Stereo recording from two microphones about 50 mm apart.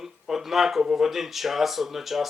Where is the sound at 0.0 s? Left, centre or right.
Centre.